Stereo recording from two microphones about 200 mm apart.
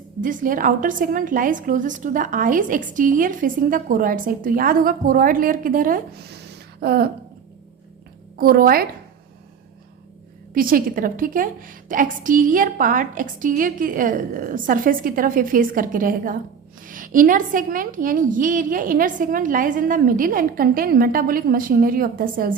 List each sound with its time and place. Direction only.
0.2 s a woman's voice: 40° right (ahead or behind)
8.4 s a woman's voice: 45° right (ahead or behind)
10.5 s a woman's voice: 45° right (ahead or behind)